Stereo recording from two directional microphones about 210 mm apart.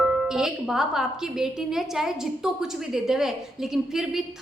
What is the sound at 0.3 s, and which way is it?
A woman's voice, 5° right (ahead or behind).